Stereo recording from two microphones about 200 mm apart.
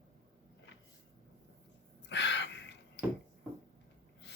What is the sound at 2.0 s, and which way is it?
Crow, 60° left (ahead or behind).